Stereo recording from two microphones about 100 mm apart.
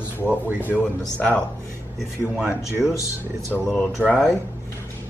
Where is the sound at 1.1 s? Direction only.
15° left (ahead or behind).